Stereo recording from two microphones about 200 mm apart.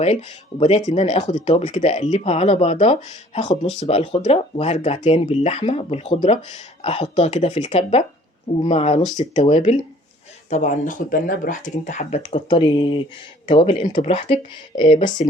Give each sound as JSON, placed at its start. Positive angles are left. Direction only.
{"t": 0.0, "sound": "speech", "side_deg": 35}